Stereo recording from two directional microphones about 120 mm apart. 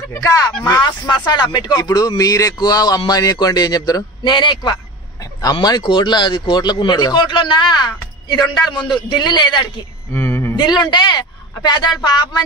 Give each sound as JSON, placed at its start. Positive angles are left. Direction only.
{"t": 0.1, "sound": "speech", "side_deg": 25}
{"t": 0.7, "sound": "speech", "side_deg": 35}
{"t": 10.1, "sound": "a sound", "side_deg": 20}
{"t": 10.5, "sound": "a man's voice", "side_deg": 35}